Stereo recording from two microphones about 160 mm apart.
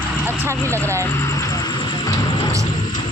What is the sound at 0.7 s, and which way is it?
Speech, 10° left (ahead or behind).